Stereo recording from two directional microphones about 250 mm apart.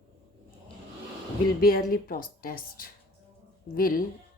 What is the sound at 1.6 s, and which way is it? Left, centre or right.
Speech, left.